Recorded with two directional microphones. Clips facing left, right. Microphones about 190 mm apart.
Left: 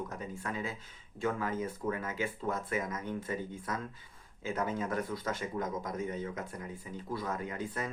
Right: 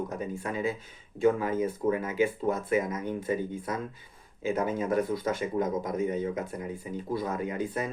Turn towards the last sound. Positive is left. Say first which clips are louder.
# right 6 dB
turn(degrees=-15)  # may be behind; listen again after turning